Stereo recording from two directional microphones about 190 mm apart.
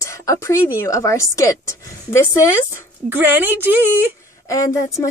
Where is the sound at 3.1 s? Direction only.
10° right (ahead or behind).